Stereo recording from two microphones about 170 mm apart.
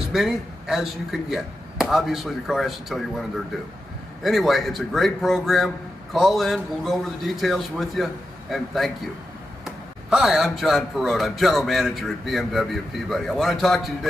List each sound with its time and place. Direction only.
0.1 s speech: centre (ahead or behind)
4.2 s speech: centre (ahead or behind)